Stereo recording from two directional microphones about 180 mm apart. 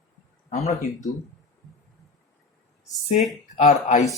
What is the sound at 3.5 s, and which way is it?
Speech, 40° left (ahead or behind).